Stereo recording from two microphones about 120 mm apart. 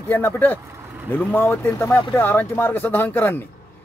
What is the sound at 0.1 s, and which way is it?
A man's voice, 15° left (ahead or behind).